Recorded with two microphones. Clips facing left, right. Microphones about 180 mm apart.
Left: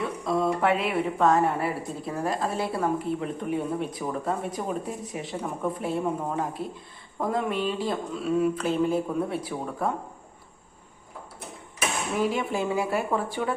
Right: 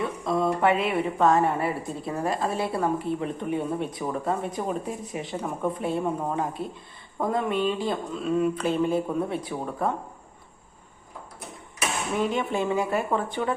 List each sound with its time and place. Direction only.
0.0 s a woman's voice: centre (ahead or behind)
12.1 s a woman's voice: 5° left (ahead or behind)